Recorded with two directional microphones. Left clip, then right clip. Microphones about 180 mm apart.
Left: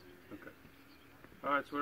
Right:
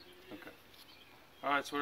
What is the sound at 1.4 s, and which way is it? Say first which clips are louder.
Speech: right 1 dB; 30° right (ahead or behind).